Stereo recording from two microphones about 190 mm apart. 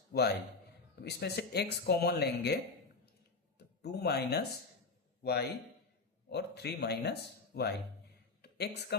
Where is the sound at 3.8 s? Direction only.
60° left (ahead or behind).